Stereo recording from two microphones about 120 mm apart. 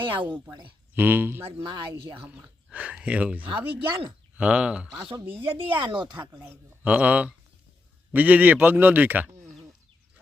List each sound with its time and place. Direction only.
0.0 s speech: 40° right (ahead or behind)
0.9 s a woman's voice: 15° right (ahead or behind)
1.6 s speech: 40° right (ahead or behind)
2.2 s a woman's voice: 10° right (ahead or behind)
5.3 s speech: 45° right (ahead or behind)
6.3 s a woman's voice: 20° right (ahead or behind)